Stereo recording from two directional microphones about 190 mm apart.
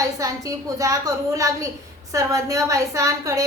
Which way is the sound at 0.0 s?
20° right (ahead or behind).